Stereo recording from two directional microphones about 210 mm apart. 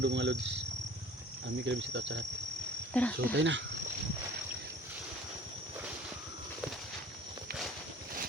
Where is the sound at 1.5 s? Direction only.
55° right (ahead or behind).